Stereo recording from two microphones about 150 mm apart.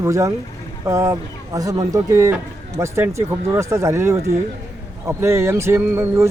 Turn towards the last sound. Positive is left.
turn(degrees=-15)  # may be behind; listen again after turning